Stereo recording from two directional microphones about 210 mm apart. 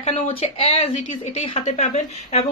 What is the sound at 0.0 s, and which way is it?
Speech, 25° left (ahead or behind).